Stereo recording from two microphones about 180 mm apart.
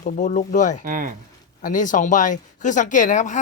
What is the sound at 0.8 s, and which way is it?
Speech, 50° right (ahead or behind).